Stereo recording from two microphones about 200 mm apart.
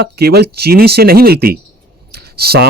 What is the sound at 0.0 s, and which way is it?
A man's voice, 50° right (ahead or behind).